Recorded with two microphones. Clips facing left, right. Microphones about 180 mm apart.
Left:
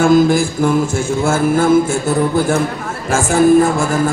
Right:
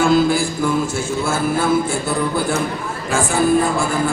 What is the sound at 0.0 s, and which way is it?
Music, 45° left (ahead or behind).